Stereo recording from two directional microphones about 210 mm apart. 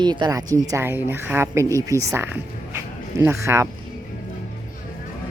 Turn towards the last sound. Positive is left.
turn(degrees=-15)  # may be behind; listen again after turning